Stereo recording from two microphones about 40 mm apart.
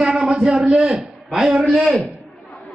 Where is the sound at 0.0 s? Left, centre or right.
Centre.